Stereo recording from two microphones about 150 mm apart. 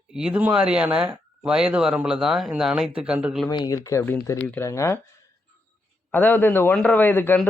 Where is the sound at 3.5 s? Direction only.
30° left (ahead or behind).